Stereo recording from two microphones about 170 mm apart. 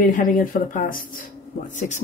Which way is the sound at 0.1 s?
50° left (ahead or behind).